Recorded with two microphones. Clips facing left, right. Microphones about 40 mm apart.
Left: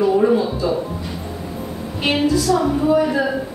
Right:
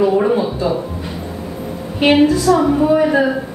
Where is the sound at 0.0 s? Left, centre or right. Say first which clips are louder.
Right 1 dB; right.